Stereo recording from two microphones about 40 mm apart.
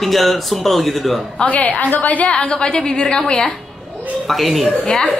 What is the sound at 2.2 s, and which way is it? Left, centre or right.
A woman's voice, left.